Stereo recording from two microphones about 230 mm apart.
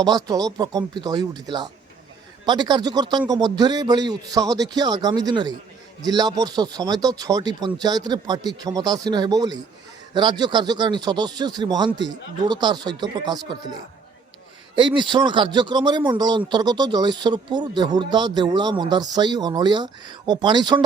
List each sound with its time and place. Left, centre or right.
0.0 s speech: centre
14.8 s speech: centre